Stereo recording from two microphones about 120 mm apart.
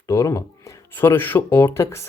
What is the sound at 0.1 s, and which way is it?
Speech, 25° left (ahead or behind).